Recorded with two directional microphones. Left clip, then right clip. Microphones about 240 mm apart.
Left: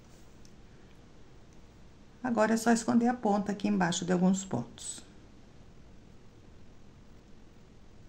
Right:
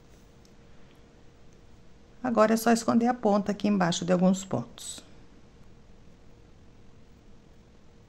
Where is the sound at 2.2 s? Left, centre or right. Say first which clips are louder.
Right 5 dB; right.